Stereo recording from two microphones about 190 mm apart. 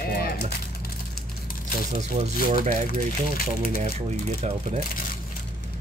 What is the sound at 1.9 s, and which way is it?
Speech, 35° right (ahead or behind).